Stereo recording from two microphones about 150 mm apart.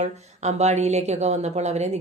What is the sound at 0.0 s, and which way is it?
Speech, 50° right (ahead or behind).